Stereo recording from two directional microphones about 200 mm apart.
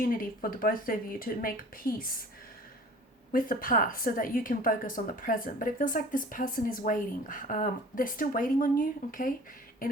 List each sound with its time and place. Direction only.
0.2 s a woman's voice: 45° left (ahead or behind)
3.3 s a woman's voice: 45° left (ahead or behind)